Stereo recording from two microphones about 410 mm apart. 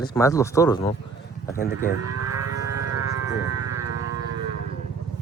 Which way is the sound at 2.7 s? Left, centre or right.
Right.